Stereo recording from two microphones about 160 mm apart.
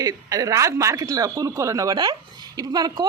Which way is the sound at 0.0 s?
20° right (ahead or behind).